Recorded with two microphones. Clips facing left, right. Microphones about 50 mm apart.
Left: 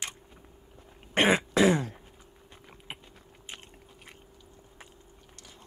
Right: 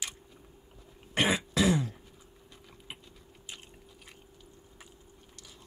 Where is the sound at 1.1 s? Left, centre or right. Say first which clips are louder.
Left 4 dB; left.